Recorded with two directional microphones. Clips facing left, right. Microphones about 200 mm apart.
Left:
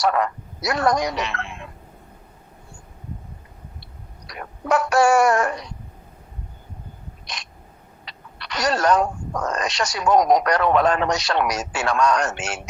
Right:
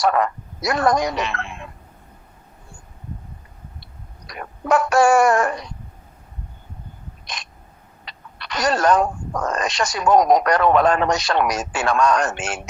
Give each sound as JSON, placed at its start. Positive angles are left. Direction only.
{"t": 0.0, "sound": "speech", "side_deg": -50}
{"t": 4.3, "sound": "speech", "side_deg": -50}
{"t": 8.0, "sound": "speech", "side_deg": -50}